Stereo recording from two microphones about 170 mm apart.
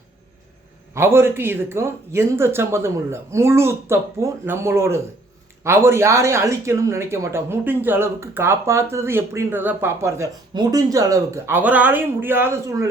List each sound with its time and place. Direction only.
0.9 s speech: 15° right (ahead or behind)